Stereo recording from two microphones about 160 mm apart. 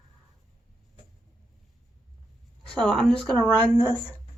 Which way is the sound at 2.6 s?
5° left (ahead or behind).